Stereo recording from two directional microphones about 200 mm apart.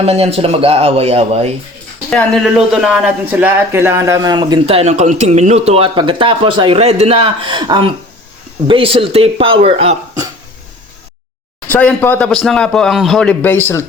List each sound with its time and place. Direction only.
0.0 s speech: 30° right (ahead or behind)
2.0 s speech: 5° left (ahead or behind); by 10.0 s 30° right (ahead or behind)
11.7 s a man's voice: 5° left (ahead or behind)